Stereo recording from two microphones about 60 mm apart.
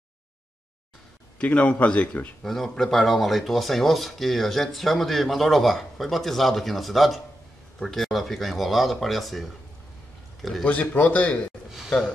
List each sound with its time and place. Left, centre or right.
1.4 s a man's voice: left
2.4 s speech: centre
10.6 s a man's voice: left